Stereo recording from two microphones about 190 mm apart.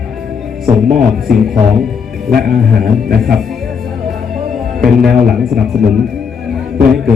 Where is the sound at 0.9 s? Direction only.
Centre (ahead or behind).